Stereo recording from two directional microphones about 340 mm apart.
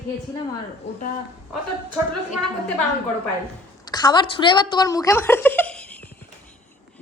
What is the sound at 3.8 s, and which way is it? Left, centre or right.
A woman's voice, centre.